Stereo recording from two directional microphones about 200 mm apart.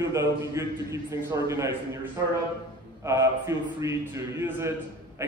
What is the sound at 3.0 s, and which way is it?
Speech, 15° right (ahead or behind).